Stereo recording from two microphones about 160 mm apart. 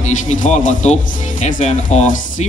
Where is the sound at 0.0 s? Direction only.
50° left (ahead or behind).